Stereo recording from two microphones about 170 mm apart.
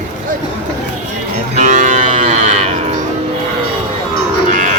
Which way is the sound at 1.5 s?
45° right (ahead or behind).